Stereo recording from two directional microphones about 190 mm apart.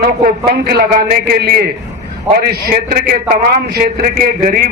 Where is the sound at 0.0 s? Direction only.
50° right (ahead or behind).